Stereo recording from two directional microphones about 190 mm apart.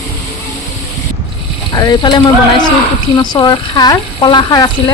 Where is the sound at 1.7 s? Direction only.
20° left (ahead or behind).